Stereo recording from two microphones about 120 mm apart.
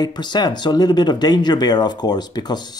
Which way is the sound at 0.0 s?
35° left (ahead or behind).